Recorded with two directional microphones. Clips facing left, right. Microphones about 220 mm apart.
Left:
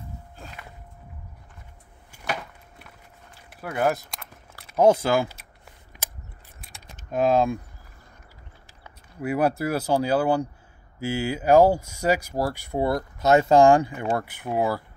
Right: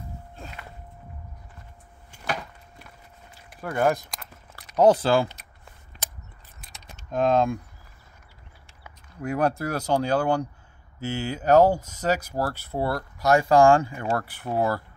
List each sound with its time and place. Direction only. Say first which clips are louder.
2.2 s a sound: even; 5° left (ahead or behind)
7.1 s speech: left 1 dB; 5° left (ahead or behind)
9.2 s speech: left 2 dB; 5° left (ahead or behind)